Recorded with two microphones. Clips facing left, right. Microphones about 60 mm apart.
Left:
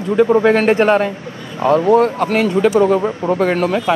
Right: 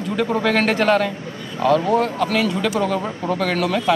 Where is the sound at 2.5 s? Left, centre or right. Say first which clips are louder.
Left 8 dB; left.